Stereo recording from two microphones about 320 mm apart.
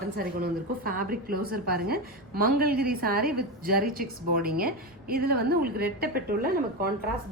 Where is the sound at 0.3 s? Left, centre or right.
Right.